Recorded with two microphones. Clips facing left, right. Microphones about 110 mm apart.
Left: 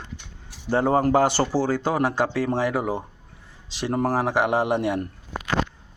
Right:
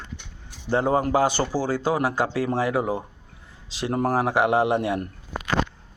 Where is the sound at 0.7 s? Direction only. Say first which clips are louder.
Left 2 dB; 40° left (ahead or behind).